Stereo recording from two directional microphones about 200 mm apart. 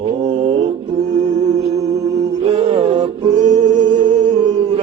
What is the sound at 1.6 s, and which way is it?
Music, 35° right (ahead or behind).